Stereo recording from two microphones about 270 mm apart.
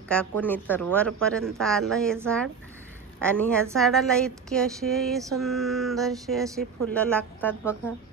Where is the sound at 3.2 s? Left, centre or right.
Centre.